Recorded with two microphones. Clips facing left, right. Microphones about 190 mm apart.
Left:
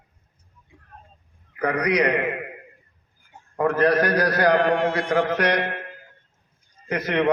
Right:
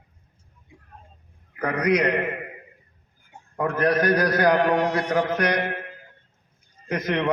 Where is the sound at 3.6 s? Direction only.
65° left (ahead or behind).